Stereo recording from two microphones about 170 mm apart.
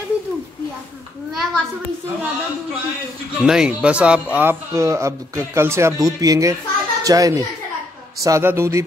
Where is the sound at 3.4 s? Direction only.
5° right (ahead or behind).